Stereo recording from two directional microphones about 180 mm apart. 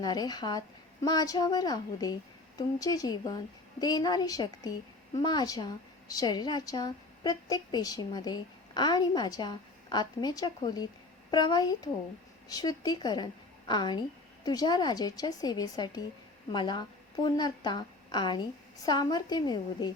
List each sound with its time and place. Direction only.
0.0 s speech: 20° left (ahead or behind)